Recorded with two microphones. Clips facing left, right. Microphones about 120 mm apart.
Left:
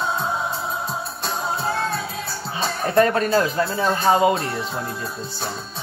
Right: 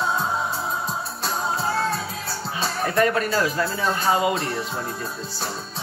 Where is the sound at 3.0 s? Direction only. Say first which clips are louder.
Left 4 dB; 30° left (ahead or behind).